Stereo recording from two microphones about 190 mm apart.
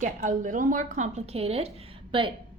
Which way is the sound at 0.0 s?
40° right (ahead or behind).